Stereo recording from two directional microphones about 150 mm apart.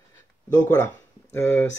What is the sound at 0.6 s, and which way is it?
Speech, 10° left (ahead or behind).